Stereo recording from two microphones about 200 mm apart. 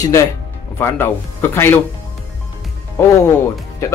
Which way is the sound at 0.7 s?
10° left (ahead or behind).